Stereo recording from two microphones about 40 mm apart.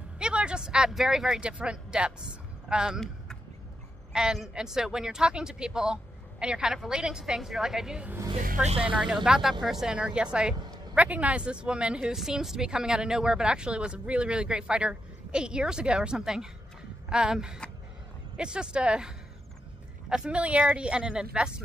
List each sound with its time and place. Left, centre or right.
0.2 s a sound: right
1.4 s speech: right
2.9 s speech: centre
4.1 s a man's voice: centre
9.0 s a man's voice: centre
10.1 s speech: right
11.0 s speech: right
12.1 s speech: centre
20.2 s speech: right